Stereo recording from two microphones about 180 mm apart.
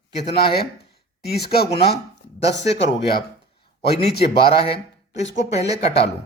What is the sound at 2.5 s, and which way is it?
Speech, 75° left (ahead or behind).